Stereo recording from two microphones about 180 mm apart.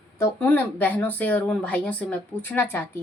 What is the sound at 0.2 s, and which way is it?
Speech, 10° left (ahead or behind).